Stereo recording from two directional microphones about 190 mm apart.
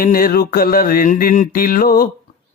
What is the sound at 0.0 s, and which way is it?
Mantra, 50° left (ahead or behind).